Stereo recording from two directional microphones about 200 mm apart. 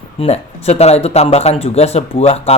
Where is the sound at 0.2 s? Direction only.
30° left (ahead or behind).